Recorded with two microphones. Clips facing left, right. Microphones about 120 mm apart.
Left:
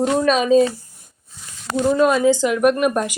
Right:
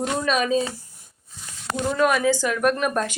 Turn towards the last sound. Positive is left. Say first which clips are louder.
# left 5 dB
turn(degrees=15)  # may be behind; listen again after turning